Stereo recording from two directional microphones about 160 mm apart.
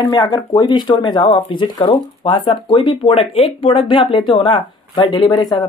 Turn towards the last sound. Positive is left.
turn(degrees=25)  # may be behind; listen again after turning